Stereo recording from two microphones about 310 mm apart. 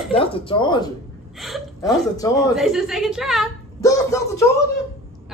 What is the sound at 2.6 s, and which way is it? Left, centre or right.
Speech, centre.